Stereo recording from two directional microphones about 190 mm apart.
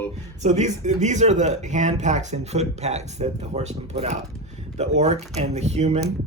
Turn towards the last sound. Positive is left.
turn(degrees=-35)  # may be behind; listen again after turning